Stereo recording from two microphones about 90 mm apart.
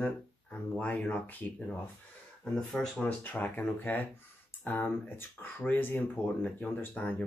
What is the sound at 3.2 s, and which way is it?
Speech, 20° left (ahead or behind).